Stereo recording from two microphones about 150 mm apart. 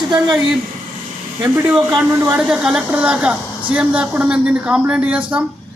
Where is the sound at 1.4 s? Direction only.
15° right (ahead or behind).